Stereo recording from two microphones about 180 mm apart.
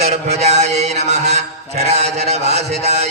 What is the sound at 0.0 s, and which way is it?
Mantra, 35° right (ahead or behind).